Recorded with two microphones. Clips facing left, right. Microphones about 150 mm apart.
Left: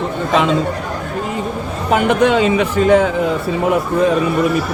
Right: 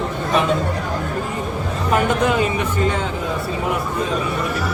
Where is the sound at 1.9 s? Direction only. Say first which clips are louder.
Left 5 dB; 85° left.